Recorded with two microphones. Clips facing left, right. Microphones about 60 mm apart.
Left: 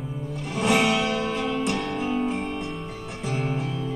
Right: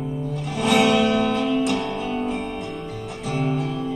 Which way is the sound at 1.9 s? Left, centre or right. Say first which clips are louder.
Even; left.